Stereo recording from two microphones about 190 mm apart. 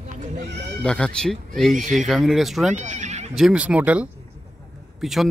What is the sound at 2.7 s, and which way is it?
Goat, 40° right (ahead or behind).